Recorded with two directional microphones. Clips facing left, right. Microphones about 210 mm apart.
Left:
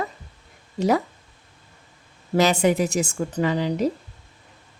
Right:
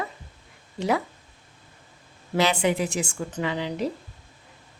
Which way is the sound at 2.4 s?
45° left (ahead or behind).